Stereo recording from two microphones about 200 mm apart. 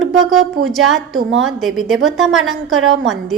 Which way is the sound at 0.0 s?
Centre (ahead or behind).